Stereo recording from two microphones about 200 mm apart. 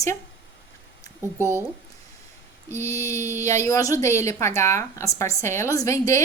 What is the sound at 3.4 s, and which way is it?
A woman's voice, 15° left (ahead or behind).